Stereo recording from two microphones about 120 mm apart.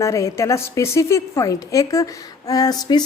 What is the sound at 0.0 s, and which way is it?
A woman's voice, 25° left (ahead or behind).